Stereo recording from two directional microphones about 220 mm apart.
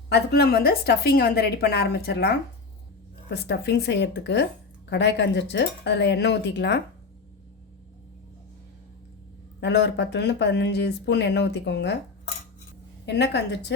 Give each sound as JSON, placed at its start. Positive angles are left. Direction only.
{"t": 0.1, "sound": "speech", "side_deg": 45}
{"t": 9.6, "sound": "speech", "side_deg": 50}
{"t": 13.1, "sound": "speech", "side_deg": 50}